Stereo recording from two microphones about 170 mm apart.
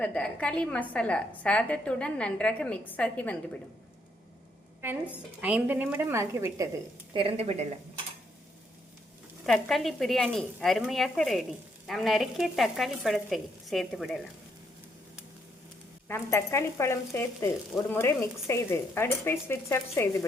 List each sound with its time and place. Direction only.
0.0 s speech: 5° left (ahead or behind)
5.4 s a woman's voice: 10° right (ahead or behind)
7.1 s a woman's voice: 30° right (ahead or behind)
9.5 s speech: centre (ahead or behind)
16.0 s speech: 15° left (ahead or behind)